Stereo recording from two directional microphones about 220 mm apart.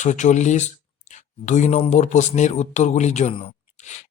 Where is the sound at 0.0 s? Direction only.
35° left (ahead or behind).